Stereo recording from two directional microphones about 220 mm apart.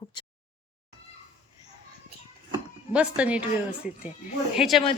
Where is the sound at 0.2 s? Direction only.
20° left (ahead or behind).